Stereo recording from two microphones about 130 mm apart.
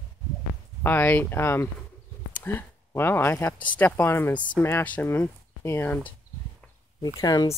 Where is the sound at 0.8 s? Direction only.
15° left (ahead or behind).